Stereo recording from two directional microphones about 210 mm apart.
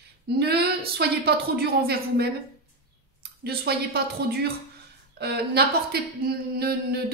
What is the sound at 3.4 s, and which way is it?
A woman's voice, 50° right (ahead or behind).